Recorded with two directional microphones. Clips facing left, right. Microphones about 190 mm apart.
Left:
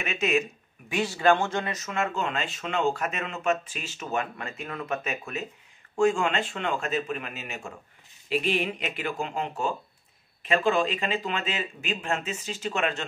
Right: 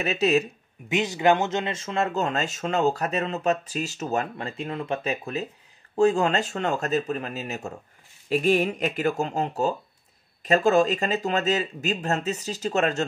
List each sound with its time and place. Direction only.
0.0 s speech: 35° right (ahead or behind)
0.8 s speech: 20° right (ahead or behind)
2.1 s speech: 40° right (ahead or behind)